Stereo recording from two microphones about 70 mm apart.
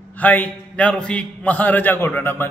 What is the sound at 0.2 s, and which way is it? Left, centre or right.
A man's voice, left.